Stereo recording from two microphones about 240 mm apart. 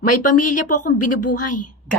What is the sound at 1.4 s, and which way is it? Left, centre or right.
Speech, left.